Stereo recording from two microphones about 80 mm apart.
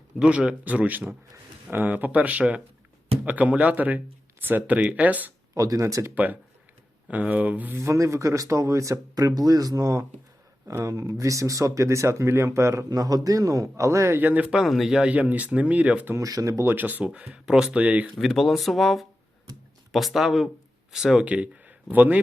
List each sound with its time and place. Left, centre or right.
0.2 s speech: centre
5.5 s speech: right
7.1 s speech: centre
7.8 s speech: right
12.9 s speech: right
14.2 s speech: centre
14.5 s speech: centre
16.1 s speech: right
16.6 s speech: right
18.1 s speech: centre; by 22.2 s right